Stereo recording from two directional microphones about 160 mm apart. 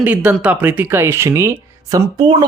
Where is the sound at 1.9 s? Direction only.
25° right (ahead or behind).